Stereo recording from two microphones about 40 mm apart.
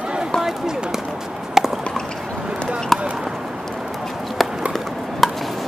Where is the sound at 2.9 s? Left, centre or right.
Centre.